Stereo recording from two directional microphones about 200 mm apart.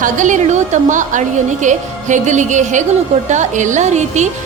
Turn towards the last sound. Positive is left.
turn(degrees=-35)  # may be behind; listen again after turning